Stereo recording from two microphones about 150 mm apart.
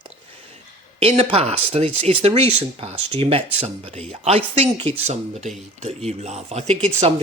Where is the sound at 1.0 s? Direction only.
40° right (ahead or behind).